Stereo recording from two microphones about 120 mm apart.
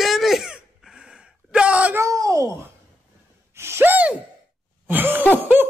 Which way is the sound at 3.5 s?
20° right (ahead or behind).